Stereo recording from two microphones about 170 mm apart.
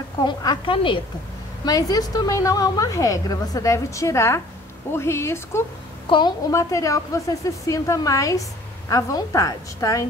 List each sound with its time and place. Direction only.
0.2 s a woman's voice: 25° left (ahead or behind)
6.0 s a woman's voice: 25° left (ahead or behind)